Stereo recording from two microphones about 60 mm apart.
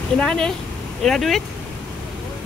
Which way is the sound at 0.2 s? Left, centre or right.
Centre.